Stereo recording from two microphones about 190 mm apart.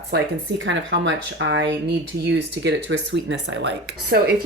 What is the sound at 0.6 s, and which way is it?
Speech, 80° right.